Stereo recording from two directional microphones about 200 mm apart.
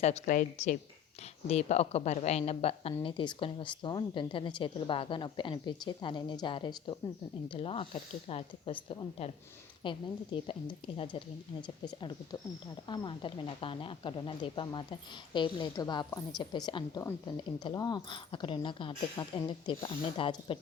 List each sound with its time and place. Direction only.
0.0 s a woman's voice: 35° left (ahead or behind)